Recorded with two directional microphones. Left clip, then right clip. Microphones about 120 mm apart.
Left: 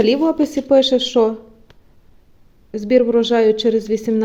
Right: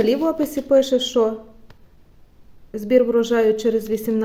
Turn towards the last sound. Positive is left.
turn(degrees=25)  # may be behind; listen again after turning